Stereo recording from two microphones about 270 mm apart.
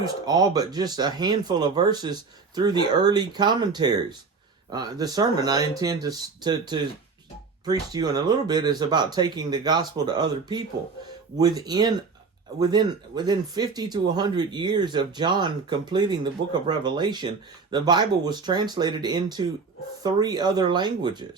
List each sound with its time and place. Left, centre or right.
0.0 s speech: centre